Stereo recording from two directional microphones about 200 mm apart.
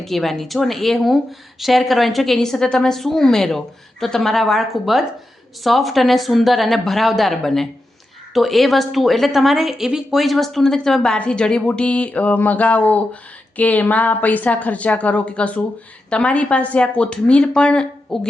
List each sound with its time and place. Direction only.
0.0 s a woman's voice: centre (ahead or behind)